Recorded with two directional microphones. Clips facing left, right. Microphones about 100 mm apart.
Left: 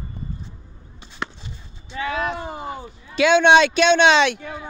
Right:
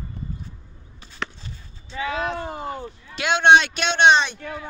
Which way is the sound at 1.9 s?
10° left (ahead or behind).